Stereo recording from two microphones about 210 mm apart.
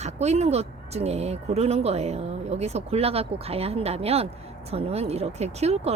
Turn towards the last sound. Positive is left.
turn(degrees=-30)  # may be behind; listen again after turning